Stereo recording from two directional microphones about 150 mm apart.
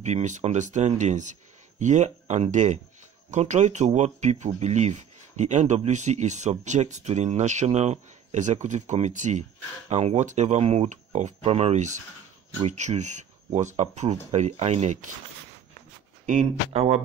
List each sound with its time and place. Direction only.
0.0 s speech: 50° right (ahead or behind)
16.3 s speech: 50° right (ahead or behind)